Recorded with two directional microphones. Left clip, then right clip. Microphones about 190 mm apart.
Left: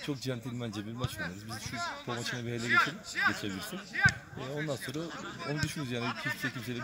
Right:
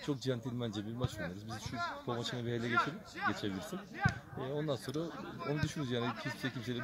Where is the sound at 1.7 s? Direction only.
20° right (ahead or behind).